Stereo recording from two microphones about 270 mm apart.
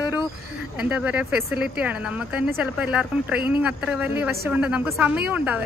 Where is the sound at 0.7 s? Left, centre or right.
Centre.